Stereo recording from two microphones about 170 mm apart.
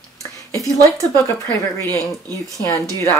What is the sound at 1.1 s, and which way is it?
Speech, 10° left (ahead or behind).